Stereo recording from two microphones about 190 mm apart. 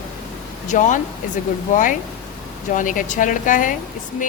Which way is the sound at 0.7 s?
40° left (ahead or behind).